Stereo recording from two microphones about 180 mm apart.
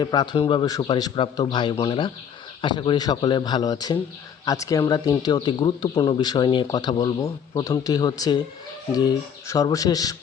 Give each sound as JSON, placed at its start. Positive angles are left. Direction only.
{"t": 0.0, "sound": "speech", "side_deg": 25}